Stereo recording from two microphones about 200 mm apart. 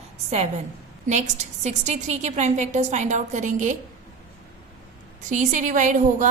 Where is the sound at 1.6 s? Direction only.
35° right (ahead or behind).